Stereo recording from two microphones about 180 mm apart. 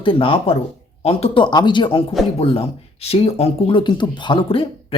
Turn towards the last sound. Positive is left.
turn(degrees=30)  # may be behind; listen again after turning